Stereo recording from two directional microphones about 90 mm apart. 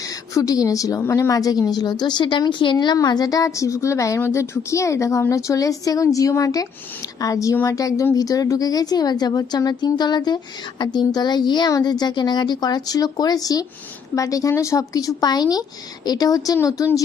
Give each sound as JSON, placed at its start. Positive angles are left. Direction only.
{"t": 0.0, "sound": "speech", "side_deg": 40}
{"t": 2.7, "sound": "speech", "side_deg": 45}